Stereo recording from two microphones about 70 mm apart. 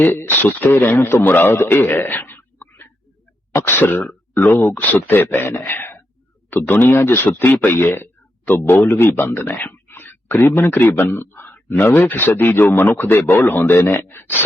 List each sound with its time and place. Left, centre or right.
0.0 s a man's voice: left